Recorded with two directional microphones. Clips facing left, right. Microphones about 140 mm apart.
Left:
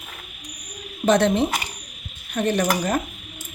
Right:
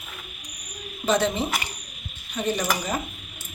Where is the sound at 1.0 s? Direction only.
65° left (ahead or behind).